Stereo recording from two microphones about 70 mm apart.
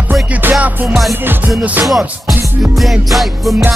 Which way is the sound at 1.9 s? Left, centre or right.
Centre.